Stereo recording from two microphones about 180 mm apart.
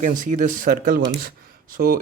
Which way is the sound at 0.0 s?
45° right (ahead or behind).